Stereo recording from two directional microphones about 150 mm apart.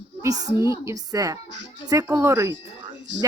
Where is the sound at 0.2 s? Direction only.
25° right (ahead or behind).